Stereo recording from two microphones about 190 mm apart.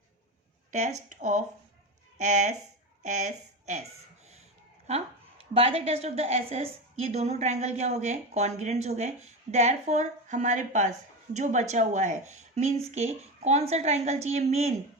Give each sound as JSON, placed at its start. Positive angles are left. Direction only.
{"t": 0.7, "sound": "a woman's voice", "side_deg": -40}
{"t": 4.9, "sound": "a woman's voice", "side_deg": -30}